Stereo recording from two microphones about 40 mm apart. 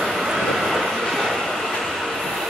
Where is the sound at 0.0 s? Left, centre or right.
Centre.